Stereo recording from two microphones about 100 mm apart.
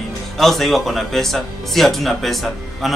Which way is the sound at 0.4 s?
Centre (ahead or behind).